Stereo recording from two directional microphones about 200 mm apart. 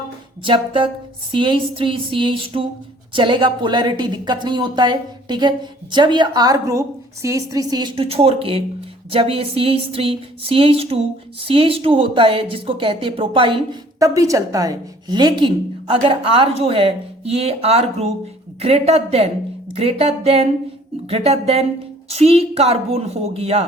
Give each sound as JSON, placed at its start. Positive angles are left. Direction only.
{"t": 0.4, "sound": "a woman's voice", "side_deg": -25}